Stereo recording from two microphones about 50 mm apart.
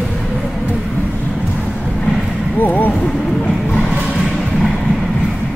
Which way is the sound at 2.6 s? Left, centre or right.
Left.